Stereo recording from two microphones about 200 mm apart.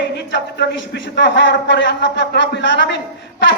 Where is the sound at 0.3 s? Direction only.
65° left (ahead or behind).